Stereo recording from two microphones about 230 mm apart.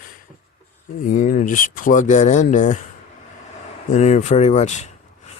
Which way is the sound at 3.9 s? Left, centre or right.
Left.